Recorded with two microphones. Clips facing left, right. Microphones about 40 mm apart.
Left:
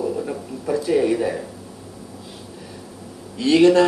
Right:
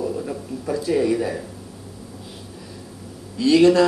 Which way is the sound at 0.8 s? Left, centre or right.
Left.